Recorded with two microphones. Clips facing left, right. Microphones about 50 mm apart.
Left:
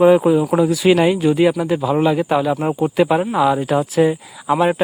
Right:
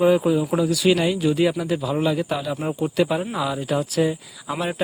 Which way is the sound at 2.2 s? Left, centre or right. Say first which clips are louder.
Left 9 dB; left.